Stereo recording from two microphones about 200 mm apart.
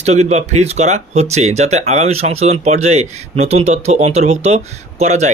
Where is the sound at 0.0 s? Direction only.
35° right (ahead or behind).